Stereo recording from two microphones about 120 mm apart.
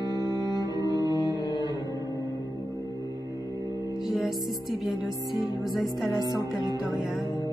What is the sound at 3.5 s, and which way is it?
Music, 30° right (ahead or behind).